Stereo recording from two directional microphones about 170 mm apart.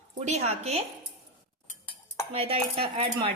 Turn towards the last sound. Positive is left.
turn(degrees=-35)  # may be behind; listen again after turning